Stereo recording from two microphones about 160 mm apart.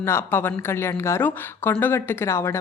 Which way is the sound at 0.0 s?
15° left (ahead or behind).